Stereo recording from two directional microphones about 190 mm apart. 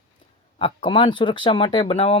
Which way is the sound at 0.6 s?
25° left (ahead or behind).